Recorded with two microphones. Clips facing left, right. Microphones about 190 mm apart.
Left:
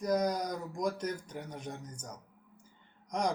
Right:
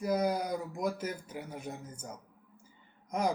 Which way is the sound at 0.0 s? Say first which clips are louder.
Even; 5° right (ahead or behind).